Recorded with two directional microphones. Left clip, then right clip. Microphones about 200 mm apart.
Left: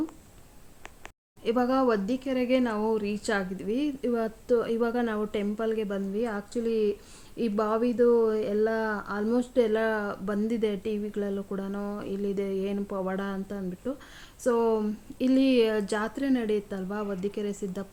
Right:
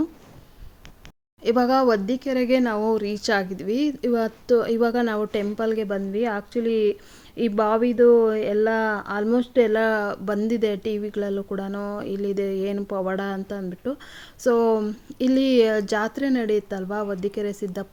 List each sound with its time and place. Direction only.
1.5 s speech: 35° right (ahead or behind)